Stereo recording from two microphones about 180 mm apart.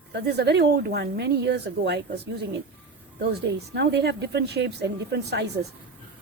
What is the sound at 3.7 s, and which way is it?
A woman's voice, 70° right (ahead or behind).